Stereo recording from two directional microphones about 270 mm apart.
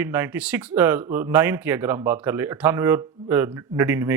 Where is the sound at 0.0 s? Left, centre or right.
Centre.